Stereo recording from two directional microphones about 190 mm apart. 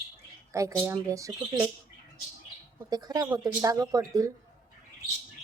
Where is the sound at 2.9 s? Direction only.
20° right (ahead or behind).